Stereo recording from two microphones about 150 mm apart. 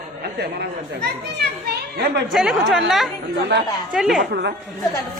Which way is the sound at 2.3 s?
5° right (ahead or behind).